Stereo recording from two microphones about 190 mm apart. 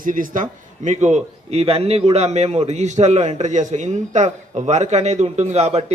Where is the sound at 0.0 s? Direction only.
45° right (ahead or behind).